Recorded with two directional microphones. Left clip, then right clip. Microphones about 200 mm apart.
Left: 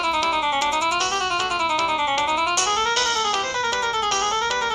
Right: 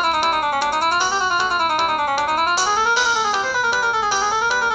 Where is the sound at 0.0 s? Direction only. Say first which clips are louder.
Right 3 dB; 25° left (ahead or behind).